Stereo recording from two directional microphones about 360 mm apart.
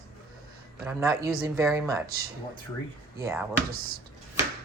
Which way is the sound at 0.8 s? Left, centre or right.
Centre.